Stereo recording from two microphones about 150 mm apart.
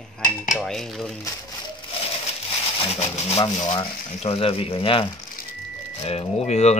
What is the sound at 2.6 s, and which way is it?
Speech, 40° left (ahead or behind).